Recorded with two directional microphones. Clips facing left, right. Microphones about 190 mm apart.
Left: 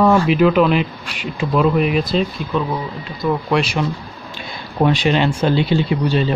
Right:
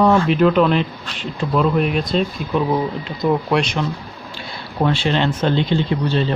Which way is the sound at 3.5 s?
5° left (ahead or behind).